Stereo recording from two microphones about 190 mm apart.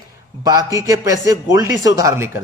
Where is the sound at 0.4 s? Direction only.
15° right (ahead or behind).